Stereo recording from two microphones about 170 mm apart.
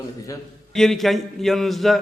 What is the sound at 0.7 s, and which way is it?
A man's voice, centre (ahead or behind).